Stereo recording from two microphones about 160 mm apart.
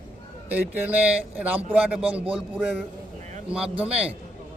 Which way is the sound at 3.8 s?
40° right (ahead or behind).